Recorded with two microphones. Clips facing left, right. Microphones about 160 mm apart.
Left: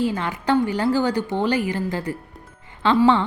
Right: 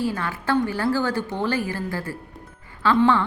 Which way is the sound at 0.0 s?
20° left (ahead or behind).